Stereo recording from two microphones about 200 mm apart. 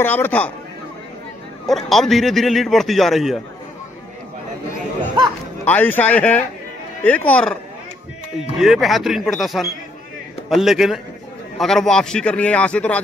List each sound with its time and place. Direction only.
0.0 s speech: 10° left (ahead or behind)
1.7 s a man's voice: centre (ahead or behind)
5.7 s a man's voice: 10° left (ahead or behind)